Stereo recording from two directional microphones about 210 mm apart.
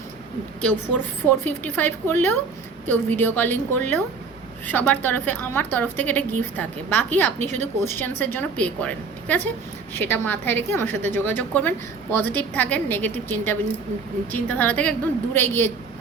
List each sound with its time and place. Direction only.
0.6 s a woman's voice: 5° left (ahead or behind)
7.4 s a woman's voice: 35° right (ahead or behind)
7.9 s a woman's voice: 10° left (ahead or behind)